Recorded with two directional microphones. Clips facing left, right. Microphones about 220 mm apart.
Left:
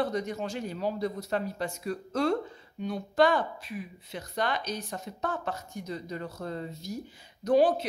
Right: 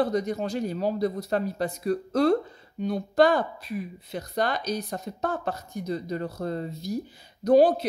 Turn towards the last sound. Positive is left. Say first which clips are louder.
# right 5 dB
turn(degrees=-35)  # may be behind; listen again after turning